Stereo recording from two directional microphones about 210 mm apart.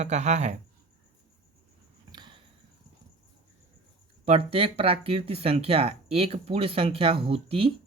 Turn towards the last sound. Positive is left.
turn(degrees=-25)  # may be behind; listen again after turning